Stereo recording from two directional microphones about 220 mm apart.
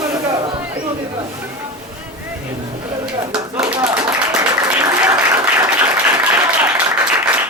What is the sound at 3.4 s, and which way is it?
Clapping, 10° right (ahead or behind).